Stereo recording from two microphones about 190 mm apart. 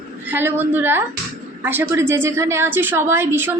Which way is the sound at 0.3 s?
10° right (ahead or behind).